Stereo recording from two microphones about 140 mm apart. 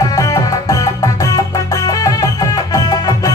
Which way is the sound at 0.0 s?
25° left (ahead or behind).